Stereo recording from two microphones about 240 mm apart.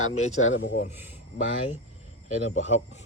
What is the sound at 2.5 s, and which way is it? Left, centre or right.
Speech, left.